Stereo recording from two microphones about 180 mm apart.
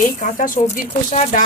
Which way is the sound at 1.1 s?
35° left (ahead or behind).